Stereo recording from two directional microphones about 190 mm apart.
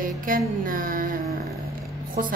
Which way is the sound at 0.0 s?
45° right (ahead or behind).